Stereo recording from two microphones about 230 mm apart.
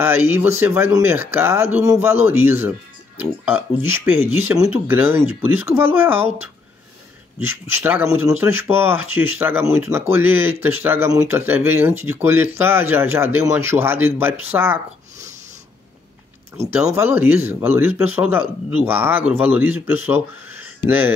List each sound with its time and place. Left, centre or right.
0.0 s speech: centre
7.3 s speech: centre
16.9 s speech: centre